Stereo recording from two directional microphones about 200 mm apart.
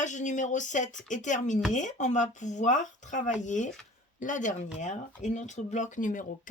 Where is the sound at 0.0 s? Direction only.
40° left (ahead or behind).